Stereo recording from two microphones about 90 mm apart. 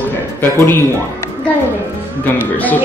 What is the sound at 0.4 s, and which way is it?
Speech, 25° left (ahead or behind).